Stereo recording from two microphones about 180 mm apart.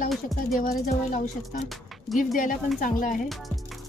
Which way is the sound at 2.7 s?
45° left (ahead or behind).